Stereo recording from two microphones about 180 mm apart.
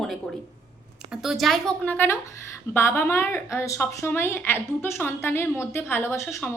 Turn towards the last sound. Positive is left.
turn(degrees=15)  # may be behind; listen again after turning